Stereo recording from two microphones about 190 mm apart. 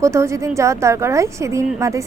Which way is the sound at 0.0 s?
15° right (ahead or behind).